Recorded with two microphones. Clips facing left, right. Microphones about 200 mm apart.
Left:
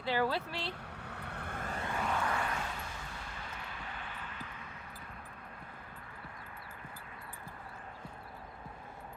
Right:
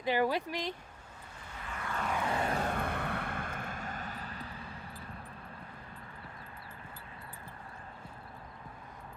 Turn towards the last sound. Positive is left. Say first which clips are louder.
# even
turn(degrees=-30)  # may be behind; listen again after turning